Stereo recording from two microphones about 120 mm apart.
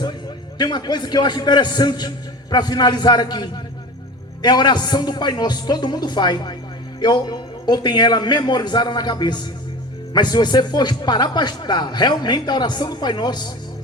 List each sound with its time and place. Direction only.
0.6 s speech: 35° left (ahead or behind)